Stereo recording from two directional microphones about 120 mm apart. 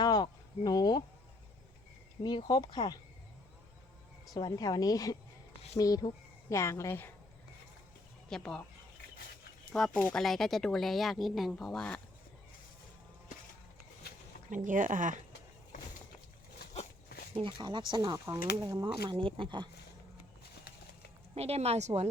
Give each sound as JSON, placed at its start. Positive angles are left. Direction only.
{"t": 0.0, "sound": "a sound", "side_deg": 35}
{"t": 2.2, "sound": "a woman's voice", "side_deg": 40}
{"t": 4.4, "sound": "a woman's voice", "side_deg": 35}
{"t": 8.3, "sound": "speech", "side_deg": 5}
{"t": 9.7, "sound": "speech", "side_deg": 0}
{"t": 14.5, "sound": "speech", "side_deg": -90}
{"t": 17.3, "sound": "speech", "side_deg": -40}
{"t": 19.1, "sound": "speech", "side_deg": -45}
{"t": 21.3, "sound": "speech", "side_deg": -60}